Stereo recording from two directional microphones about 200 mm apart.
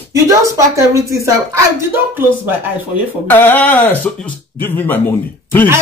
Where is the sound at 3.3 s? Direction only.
10° left (ahead or behind).